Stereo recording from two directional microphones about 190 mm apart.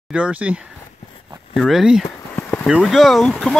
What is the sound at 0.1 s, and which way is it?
Speech, 5° right (ahead or behind).